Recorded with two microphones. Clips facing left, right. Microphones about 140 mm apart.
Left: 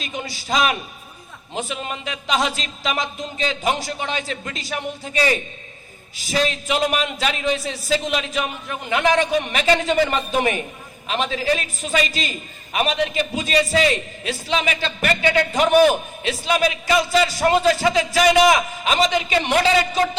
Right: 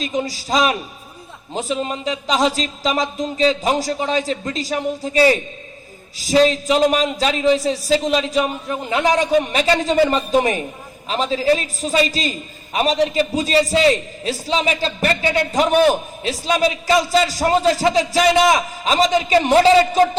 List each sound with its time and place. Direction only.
0.0 s speech: 35° right (ahead or behind)